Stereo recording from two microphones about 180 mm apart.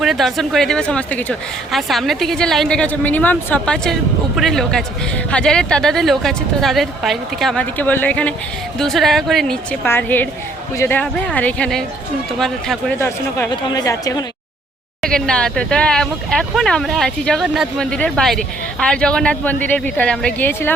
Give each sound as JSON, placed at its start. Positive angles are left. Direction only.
{"t": 0.0, "sound": "a woman's voice", "side_deg": 0}
{"t": 13.0, "sound": "speech", "side_deg": 15}
{"t": 15.0, "sound": "a woman's voice", "side_deg": 5}